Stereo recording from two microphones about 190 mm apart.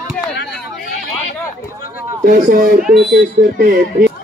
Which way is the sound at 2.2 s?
45° right (ahead or behind).